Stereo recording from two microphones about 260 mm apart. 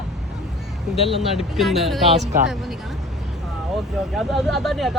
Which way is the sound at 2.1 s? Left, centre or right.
Right.